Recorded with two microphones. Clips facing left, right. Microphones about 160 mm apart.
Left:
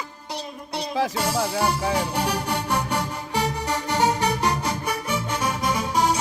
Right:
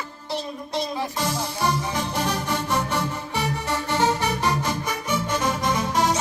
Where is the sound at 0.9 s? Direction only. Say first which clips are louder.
Left 3 dB; 75° left (ahead or behind).